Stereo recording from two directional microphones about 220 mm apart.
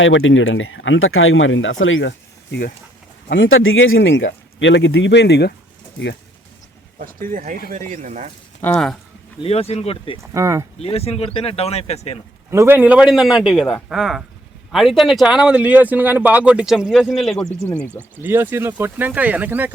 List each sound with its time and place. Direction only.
0.0 s speech: 60° left (ahead or behind)
3.2 s speech: 60° left (ahead or behind)
7.0 s speech: 40° right (ahead or behind)
8.6 s speech: 5° left (ahead or behind)
9.4 s speech: 25° left (ahead or behind)
10.3 s speech: 15° right (ahead or behind)
10.8 s speech: 25° left (ahead or behind)
12.5 s speech: 10° right (ahead or behind)
18.2 s speech: 10° right (ahead or behind)